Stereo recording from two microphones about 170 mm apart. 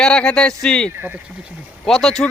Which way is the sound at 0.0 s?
5° left (ahead or behind).